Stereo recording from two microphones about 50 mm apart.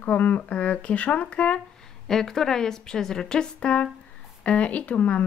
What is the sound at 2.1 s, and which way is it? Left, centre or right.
A woman's voice, centre.